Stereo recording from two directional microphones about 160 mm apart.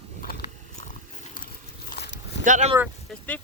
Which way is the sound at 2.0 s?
90° left.